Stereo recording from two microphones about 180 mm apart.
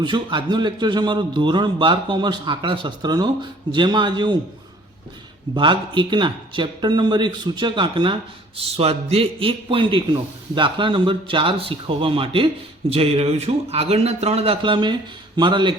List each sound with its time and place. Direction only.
0.0 s speech: 25° right (ahead or behind)
5.5 s a man's voice: 25° right (ahead or behind)